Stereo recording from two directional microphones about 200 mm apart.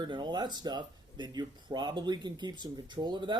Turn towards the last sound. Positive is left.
turn(degrees=-20)  # may be behind; listen again after turning